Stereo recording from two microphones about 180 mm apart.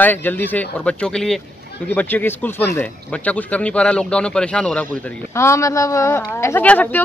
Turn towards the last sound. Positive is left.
turn(degrees=10)  # may be behind; listen again after turning